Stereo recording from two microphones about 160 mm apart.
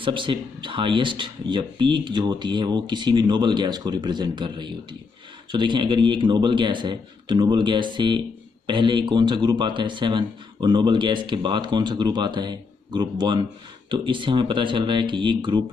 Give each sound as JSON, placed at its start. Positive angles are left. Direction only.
{"t": 0.0, "sound": "speech", "side_deg": -30}